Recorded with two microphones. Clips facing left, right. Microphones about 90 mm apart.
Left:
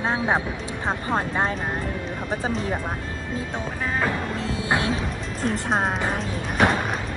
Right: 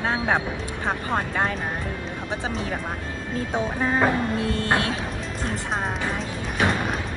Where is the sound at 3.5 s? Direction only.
15° right (ahead or behind).